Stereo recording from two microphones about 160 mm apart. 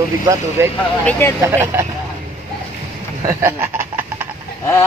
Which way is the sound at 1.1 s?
15° left (ahead or behind).